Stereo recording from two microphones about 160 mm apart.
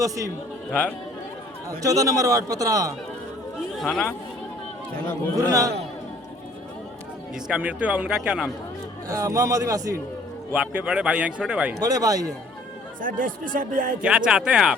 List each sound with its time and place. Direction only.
0.7 s speech: 10° left (ahead or behind)
1.8 s a man's voice: 20° right (ahead or behind)
3.8 s speech: centre (ahead or behind)
5.4 s a man's voice: 20° right (ahead or behind)
7.3 s speech: 5° right (ahead or behind)
9.0 s a man's voice: 20° right (ahead or behind)
10.5 s speech: 5° right (ahead or behind)
11.8 s a man's voice: 20° right (ahead or behind)
13.0 s speech: 55° right (ahead or behind)
14.0 s speech: 5° right (ahead or behind)